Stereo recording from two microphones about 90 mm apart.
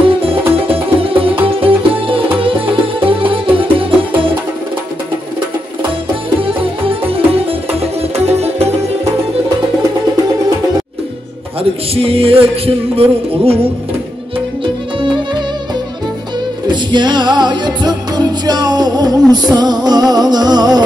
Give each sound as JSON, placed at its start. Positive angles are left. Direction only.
{"t": 0.0, "sound": "music", "side_deg": -90}
{"t": 6.4, "sound": "music", "side_deg": -85}
{"t": 11.9, "sound": "music", "side_deg": -90}
{"t": 14.6, "sound": "music", "side_deg": -65}
{"t": 16.6, "sound": "music", "side_deg": -55}